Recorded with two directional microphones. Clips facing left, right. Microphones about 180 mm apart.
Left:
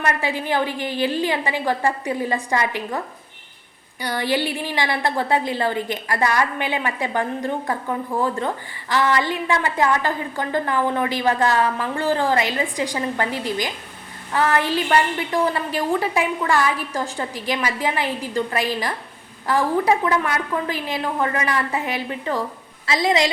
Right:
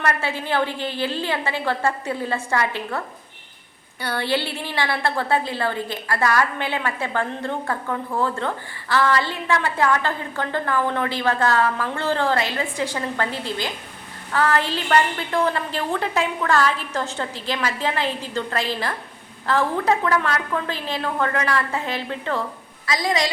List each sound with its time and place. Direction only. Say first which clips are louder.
0.0 s a woman's voice: left 1 dB; 15° left (ahead or behind)
4.0 s a woman's voice: left 2 dB; 15° left (ahead or behind)
22.9 s a woman's voice: left 3 dB; 25° left (ahead or behind)